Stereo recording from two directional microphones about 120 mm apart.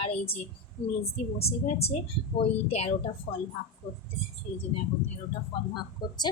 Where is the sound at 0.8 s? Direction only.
50° left (ahead or behind).